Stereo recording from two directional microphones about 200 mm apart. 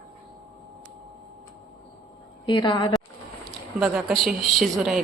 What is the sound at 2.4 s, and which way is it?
Speech, 25° left (ahead or behind).